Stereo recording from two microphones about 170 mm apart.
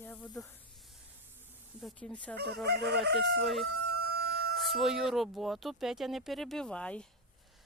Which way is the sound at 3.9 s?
70° right (ahead or behind).